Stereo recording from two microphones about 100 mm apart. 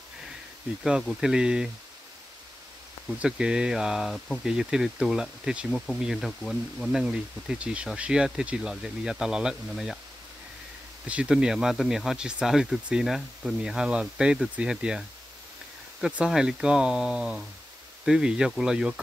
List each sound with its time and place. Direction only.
0.8 s speech: 5° right (ahead or behind)
3.2 s speech: 10° right (ahead or behind)
11.1 s speech: 10° right (ahead or behind)